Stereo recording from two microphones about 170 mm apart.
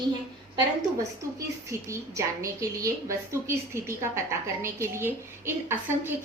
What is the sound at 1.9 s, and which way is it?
A woman's voice, 15° right (ahead or behind).